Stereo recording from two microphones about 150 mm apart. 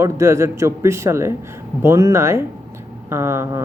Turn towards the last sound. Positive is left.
turn(degrees=-15)  # may be behind; listen again after turning